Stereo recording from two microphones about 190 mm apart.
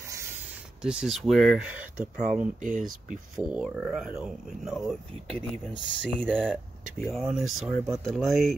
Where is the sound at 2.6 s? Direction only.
45° right (ahead or behind).